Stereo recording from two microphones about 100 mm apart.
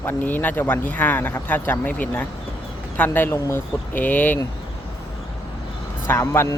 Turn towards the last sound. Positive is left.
turn(degrees=25)  # may be behind; listen again after turning